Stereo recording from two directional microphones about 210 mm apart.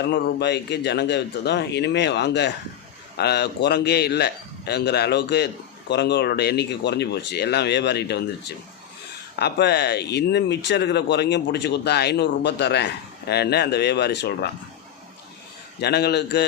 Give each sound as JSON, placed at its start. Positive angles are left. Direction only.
{"t": 0.0, "sound": "speech", "side_deg": 50}
{"t": 15.8, "sound": "speech", "side_deg": 50}